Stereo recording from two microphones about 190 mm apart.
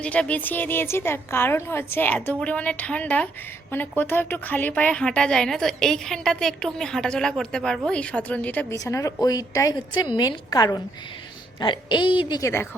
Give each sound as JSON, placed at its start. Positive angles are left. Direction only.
{"t": 0.0, "sound": "a woman's voice", "side_deg": 5}